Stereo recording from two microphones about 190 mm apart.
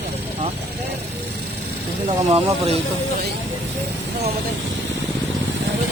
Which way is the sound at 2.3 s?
30° right (ahead or behind).